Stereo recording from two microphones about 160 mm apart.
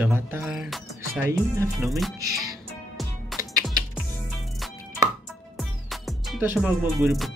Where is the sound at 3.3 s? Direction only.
Centre (ahead or behind).